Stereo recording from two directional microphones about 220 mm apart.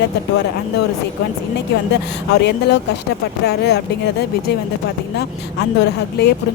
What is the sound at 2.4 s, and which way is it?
Speech, 50° left (ahead or behind).